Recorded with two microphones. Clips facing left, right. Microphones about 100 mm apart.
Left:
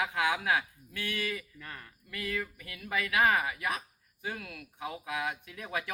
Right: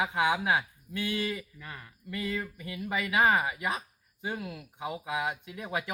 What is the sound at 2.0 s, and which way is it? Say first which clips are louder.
Speech: right 2 dB; 20° right (ahead or behind).